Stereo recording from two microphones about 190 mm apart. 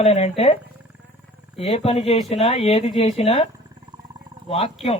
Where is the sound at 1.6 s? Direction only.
35° left (ahead or behind).